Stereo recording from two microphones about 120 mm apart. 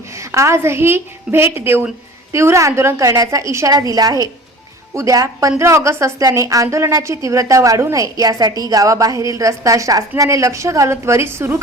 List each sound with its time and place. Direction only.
0.2 s a woman's voice: 25° right (ahead or behind)